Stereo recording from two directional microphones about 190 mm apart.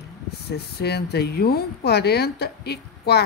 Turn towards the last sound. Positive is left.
turn(degrees=55)  # may be behind; listen again after turning